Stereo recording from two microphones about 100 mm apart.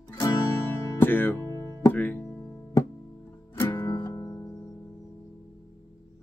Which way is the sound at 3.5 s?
25° left (ahead or behind).